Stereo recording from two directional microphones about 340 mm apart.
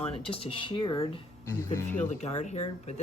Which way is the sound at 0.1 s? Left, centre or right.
Centre.